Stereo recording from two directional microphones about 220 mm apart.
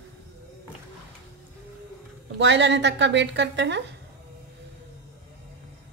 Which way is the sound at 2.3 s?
55° right (ahead or behind).